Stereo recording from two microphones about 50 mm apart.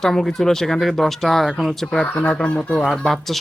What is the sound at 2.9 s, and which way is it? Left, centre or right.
Speech, centre.